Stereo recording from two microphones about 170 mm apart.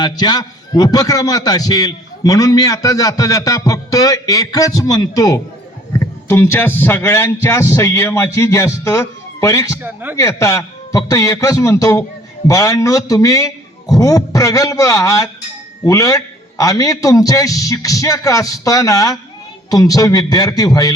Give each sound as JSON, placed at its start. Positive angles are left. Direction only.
{"t": 0.0, "sound": "a man's voice", "side_deg": 25}
{"t": 9.7, "sound": "a man's voice", "side_deg": -10}
{"t": 10.2, "sound": "a man's voice", "side_deg": 20}